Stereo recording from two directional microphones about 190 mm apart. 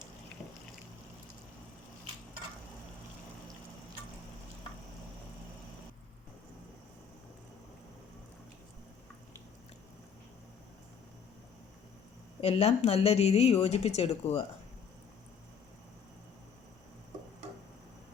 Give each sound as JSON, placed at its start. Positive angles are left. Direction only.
{"t": 12.4, "sound": "a woman's voice", "side_deg": 30}